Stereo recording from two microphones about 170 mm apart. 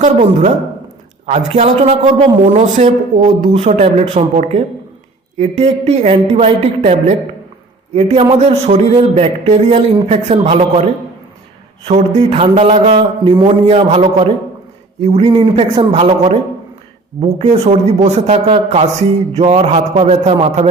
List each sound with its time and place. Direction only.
0.0 s a man's voice: 40° right (ahead or behind)
11.9 s a man's voice: 40° right (ahead or behind)